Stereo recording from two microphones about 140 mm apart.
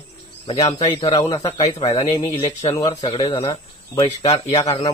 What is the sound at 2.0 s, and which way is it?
Speech, 25° left (ahead or behind).